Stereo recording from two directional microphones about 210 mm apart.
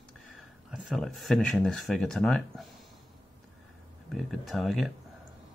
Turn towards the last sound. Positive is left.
turn(degrees=0)  # may be behind; listen again after turning